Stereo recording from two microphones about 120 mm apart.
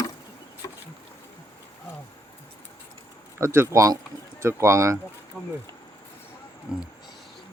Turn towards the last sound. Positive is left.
turn(degrees=-10)  # may be behind; listen again after turning